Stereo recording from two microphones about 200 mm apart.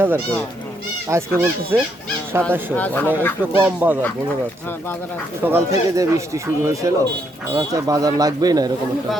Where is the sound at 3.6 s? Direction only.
10° right (ahead or behind).